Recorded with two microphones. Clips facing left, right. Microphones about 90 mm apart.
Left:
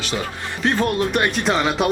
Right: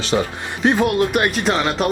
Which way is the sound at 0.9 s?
5° right (ahead or behind).